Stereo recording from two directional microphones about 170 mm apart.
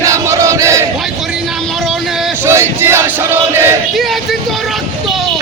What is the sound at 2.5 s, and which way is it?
Battle cry, 15° right (ahead or behind).